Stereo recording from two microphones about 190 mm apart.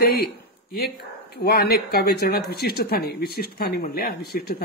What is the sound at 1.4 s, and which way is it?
Speech, 55° left (ahead or behind).